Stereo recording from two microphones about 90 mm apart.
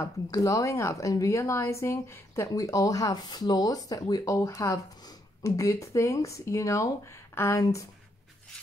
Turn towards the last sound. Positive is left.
turn(degrees=40)  # may be behind; listen again after turning